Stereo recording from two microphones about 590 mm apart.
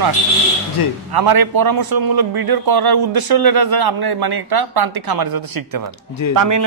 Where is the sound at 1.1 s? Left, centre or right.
Right.